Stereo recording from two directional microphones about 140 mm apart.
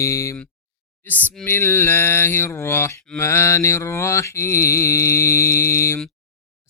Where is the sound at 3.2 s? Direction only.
20° left (ahead or behind).